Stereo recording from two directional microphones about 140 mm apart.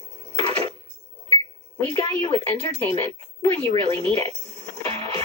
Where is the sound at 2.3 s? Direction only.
45° right (ahead or behind).